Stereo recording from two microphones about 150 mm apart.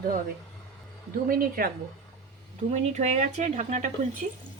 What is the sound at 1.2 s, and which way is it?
Speech, 75° right (ahead or behind).